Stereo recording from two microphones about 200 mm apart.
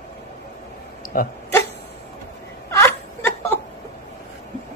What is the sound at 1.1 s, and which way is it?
Speech, 50° left (ahead or behind).